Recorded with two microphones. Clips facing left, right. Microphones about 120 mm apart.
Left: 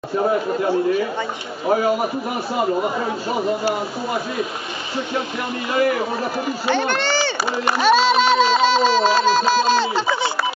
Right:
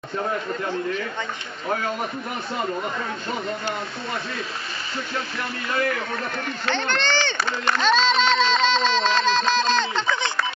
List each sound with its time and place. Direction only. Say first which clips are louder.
0.2 s speech: left 7 dB; 20° left (ahead or behind)
5.7 s speech: left 6 dB; 15° left (ahead or behind)